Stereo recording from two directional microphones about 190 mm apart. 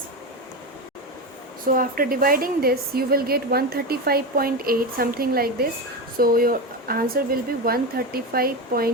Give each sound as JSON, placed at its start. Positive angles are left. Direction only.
{"t": 1.6, "sound": "a woman's voice", "side_deg": -50}